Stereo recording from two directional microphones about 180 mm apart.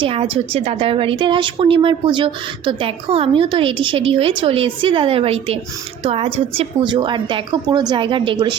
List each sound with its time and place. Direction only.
0.0 s a woman's voice: 30° right (ahead or behind)